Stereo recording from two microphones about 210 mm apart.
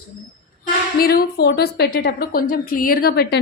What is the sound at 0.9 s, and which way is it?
A woman's voice, 50° left (ahead or behind).